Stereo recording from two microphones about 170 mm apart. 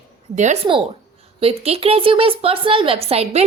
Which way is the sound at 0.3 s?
40° right (ahead or behind).